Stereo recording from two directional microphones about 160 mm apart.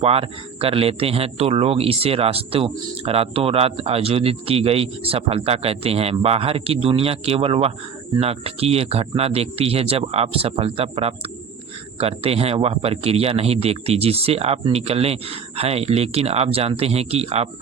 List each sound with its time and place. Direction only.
0.0 s speech: 35° right (ahead or behind)